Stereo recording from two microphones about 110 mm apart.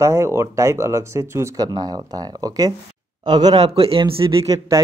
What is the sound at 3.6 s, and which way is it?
Speech, 60° right (ahead or behind).